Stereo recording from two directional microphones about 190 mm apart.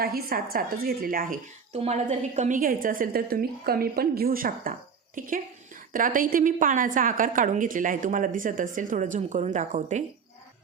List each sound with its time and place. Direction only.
0.0 s a woman's voice: 50° right (ahead or behind)
1.7 s a woman's voice: 35° right (ahead or behind)